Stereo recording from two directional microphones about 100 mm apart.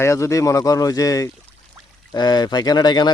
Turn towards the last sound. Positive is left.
turn(degrees=45)  # may be behind; listen again after turning